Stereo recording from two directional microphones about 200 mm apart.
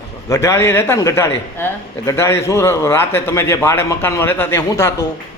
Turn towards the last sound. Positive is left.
turn(degrees=15)  # may be behind; listen again after turning